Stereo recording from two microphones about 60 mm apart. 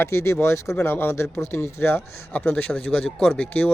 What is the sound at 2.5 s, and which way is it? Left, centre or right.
Speech, left.